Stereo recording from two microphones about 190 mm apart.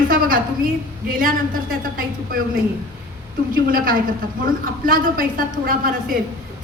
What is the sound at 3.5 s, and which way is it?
A woman's voice, 50° right (ahead or behind).